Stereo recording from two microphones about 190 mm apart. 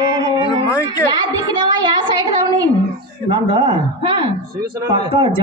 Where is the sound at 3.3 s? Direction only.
25° right (ahead or behind).